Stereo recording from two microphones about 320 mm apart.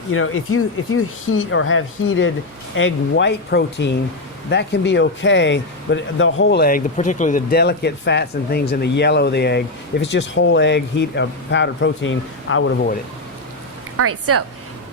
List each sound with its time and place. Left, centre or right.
0.1 s speech: left
13.9 s speech: right